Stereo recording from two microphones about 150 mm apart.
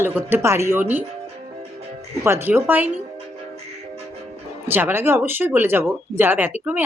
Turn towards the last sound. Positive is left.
turn(degrees=-15)  # may be behind; listen again after turning